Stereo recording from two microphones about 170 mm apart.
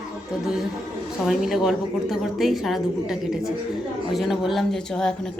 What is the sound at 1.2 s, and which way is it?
A woman's voice, centre (ahead or behind).